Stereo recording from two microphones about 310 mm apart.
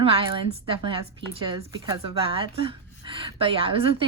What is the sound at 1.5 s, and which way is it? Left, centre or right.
A woman's voice, centre.